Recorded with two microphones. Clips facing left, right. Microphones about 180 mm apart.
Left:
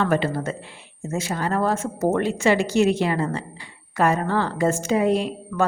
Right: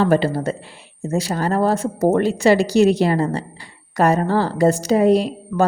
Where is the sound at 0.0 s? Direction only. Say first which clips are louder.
Right 5 dB; 35° right (ahead or behind).